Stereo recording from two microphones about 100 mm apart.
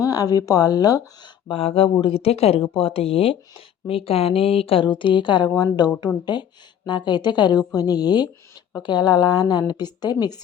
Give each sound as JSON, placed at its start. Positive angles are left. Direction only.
{"t": 0.0, "sound": "speech", "side_deg": 40}
{"t": 1.5, "sound": "a woman's voice", "side_deg": 70}